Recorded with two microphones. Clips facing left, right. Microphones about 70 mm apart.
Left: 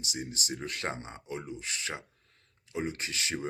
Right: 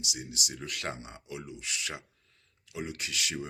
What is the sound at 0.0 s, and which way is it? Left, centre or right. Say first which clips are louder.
Speech: left 1 dB; left.